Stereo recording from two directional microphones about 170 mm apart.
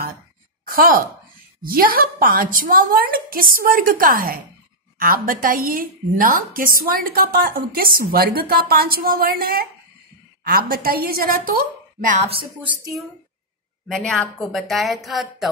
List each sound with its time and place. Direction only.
0.7 s a woman's voice: 60° right (ahead or behind)
12.3 s speech: 30° right (ahead or behind)
13.8 s a woman's voice: 5° left (ahead or behind)